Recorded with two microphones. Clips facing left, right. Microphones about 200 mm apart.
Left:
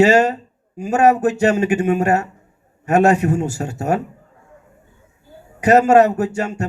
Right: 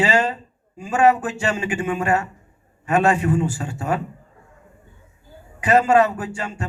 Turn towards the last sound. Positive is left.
turn(degrees=45)  # may be behind; listen again after turning